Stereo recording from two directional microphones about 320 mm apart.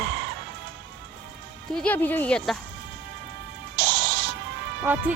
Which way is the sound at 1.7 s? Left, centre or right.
Centre.